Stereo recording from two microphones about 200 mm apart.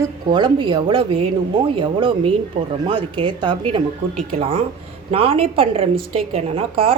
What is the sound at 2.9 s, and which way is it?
Speech, 25° right (ahead or behind).